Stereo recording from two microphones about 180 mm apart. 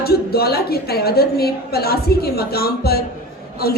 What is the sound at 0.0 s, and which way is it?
A woman's voice, 60° left (ahead or behind).